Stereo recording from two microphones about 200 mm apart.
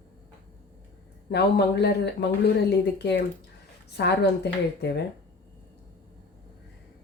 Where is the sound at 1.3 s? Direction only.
55° left (ahead or behind).